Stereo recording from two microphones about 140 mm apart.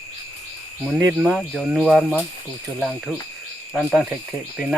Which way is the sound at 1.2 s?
Centre (ahead or behind).